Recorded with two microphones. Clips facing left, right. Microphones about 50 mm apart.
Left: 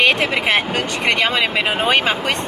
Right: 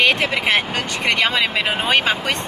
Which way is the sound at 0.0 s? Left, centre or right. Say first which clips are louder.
Left 1 dB; centre.